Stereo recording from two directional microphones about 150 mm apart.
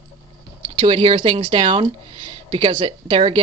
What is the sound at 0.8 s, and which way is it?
Speech, 35° right (ahead or behind).